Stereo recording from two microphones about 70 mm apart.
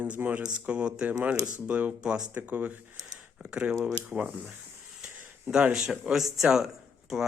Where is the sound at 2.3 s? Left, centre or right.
Right.